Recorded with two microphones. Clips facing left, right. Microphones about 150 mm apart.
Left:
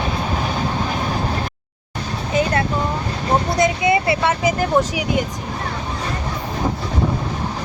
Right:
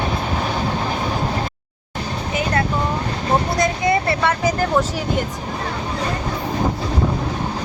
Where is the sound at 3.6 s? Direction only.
20° left (ahead or behind).